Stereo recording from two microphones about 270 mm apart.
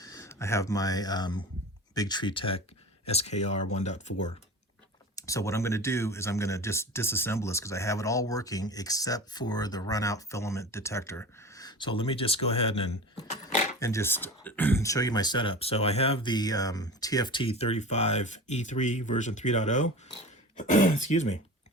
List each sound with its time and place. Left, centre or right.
0.0 s speech: centre
5.1 s speech: centre
13.7 s speech: centre